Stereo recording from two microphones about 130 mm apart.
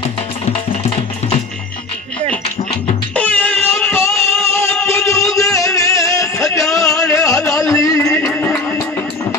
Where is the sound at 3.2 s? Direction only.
10° left (ahead or behind).